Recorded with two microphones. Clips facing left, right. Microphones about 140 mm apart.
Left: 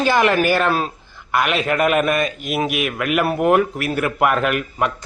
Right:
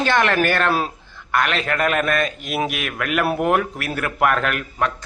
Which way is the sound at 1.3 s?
10° left (ahead or behind).